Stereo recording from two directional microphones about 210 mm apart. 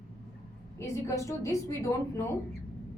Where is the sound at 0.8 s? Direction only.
15° left (ahead or behind).